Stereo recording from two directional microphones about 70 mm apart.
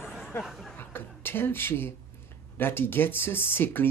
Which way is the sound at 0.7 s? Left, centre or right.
Left.